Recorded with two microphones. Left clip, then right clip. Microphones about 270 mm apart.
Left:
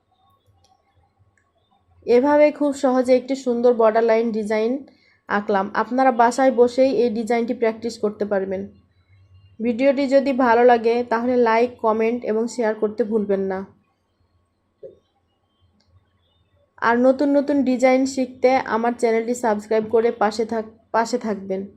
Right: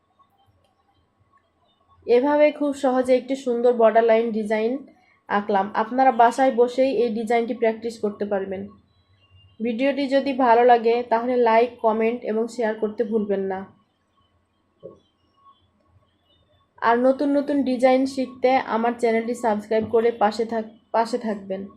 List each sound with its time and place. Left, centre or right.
2.0 s a woman's voice: left
16.8 s a woman's voice: left